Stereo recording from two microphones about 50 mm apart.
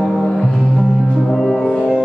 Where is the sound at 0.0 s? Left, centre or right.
Centre.